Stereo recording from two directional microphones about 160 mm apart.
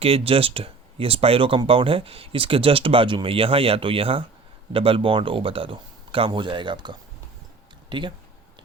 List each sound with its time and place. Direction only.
0.0 s speech: 35° right (ahead or behind)